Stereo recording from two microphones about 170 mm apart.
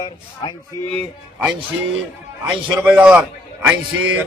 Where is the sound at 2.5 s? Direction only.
5° right (ahead or behind).